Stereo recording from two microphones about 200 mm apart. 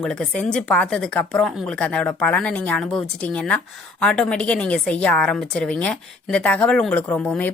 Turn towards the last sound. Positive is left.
turn(degrees=5)  # may be behind; listen again after turning